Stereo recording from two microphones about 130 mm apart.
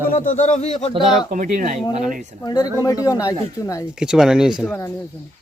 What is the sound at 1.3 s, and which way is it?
Speech, 90° right.